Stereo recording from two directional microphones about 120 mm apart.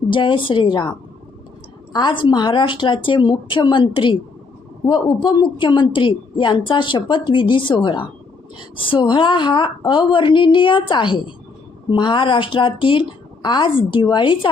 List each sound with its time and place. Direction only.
0.1 s a woman's voice: 45° left (ahead or behind)
1.9 s a woman's voice: 40° left (ahead or behind)